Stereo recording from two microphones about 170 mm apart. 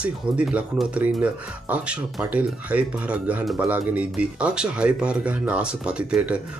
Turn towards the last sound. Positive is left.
turn(degrees=-5)  # may be behind; listen again after turning